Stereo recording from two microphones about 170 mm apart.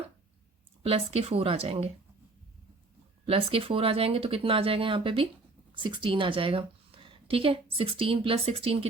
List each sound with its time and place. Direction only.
0.9 s speech: 35° right (ahead or behind)
3.2 s a woman's voice: 35° right (ahead or behind)